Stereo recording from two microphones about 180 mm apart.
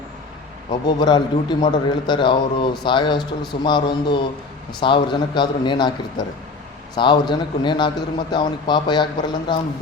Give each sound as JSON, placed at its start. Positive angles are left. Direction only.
{"t": 0.9, "sound": "speech", "side_deg": 25}